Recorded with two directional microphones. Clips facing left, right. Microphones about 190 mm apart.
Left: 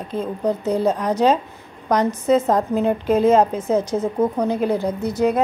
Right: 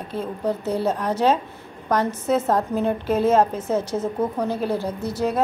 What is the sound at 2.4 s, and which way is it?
Speech, 10° left (ahead or behind).